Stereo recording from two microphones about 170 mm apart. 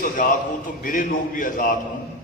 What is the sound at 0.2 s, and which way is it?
A man's voice, 50° left (ahead or behind).